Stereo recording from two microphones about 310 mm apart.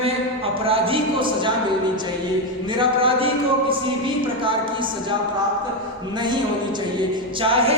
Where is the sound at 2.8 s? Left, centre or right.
Centre.